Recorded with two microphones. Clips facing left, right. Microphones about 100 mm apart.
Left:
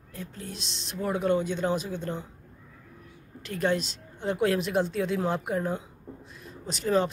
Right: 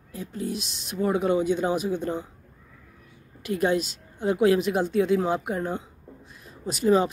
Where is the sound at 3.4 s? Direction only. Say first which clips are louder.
Right 3 dB; 10° right (ahead or behind).